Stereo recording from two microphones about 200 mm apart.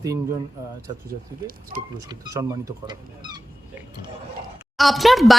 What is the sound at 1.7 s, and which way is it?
Speech, 45° right (ahead or behind).